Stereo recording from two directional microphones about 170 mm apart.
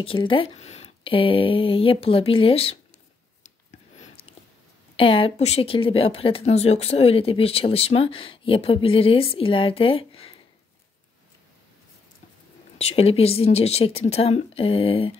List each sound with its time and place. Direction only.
0.0 s speech: 30° left (ahead or behind)
4.0 s a sound: 35° left (ahead or behind)
4.9 s speech: 30° left (ahead or behind)
12.7 s speech: 35° left (ahead or behind)